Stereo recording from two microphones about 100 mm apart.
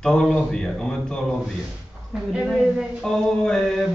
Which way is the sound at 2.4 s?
5° right (ahead or behind).